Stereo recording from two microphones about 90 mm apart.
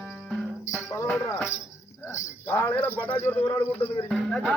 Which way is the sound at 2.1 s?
30° left (ahead or behind).